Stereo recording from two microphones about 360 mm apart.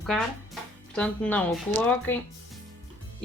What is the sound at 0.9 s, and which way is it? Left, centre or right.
Speech, centre.